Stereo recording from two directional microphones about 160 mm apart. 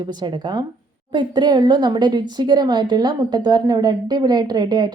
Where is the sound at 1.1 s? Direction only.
30° right (ahead or behind).